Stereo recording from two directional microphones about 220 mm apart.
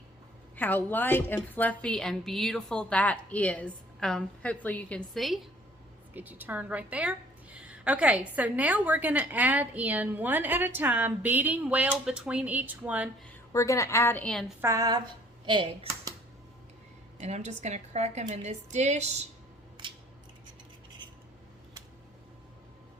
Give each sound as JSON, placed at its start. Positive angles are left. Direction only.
{"t": 0.5, "sound": "a woman's voice", "side_deg": 10}
{"t": 13.5, "sound": "a woman's voice", "side_deg": 15}
{"t": 14.6, "sound": "a woman's voice", "side_deg": -15}
{"t": 17.2, "sound": "a woman's voice", "side_deg": -30}